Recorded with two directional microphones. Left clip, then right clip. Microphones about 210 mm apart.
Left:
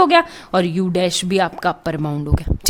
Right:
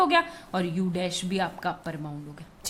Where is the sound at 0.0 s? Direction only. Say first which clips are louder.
Left 9 dB; 40° left (ahead or behind).